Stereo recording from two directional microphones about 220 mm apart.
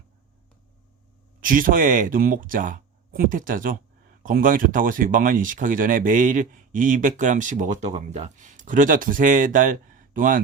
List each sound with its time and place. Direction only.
1.4 s speech: 40° right (ahead or behind)